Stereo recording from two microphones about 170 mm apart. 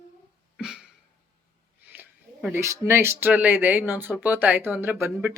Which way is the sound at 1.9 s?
10° right (ahead or behind).